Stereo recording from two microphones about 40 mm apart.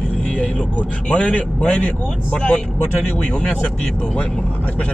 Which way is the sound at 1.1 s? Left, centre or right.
Left.